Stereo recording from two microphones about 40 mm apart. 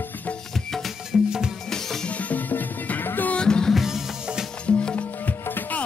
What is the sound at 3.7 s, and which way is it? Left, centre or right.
Music, centre.